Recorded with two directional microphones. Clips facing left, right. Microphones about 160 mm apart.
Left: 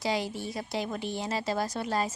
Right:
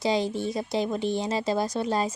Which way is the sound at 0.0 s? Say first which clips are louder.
Right 5 dB; 20° right (ahead or behind).